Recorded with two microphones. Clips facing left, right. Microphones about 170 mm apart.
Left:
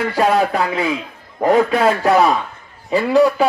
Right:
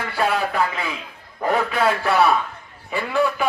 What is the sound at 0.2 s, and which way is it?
A man's voice, 40° left (ahead or behind).